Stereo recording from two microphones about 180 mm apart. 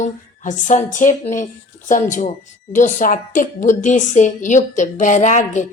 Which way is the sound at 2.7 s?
45° left (ahead or behind).